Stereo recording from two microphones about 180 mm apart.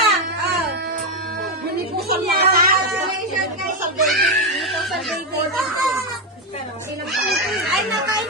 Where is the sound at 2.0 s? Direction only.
60° right (ahead or behind).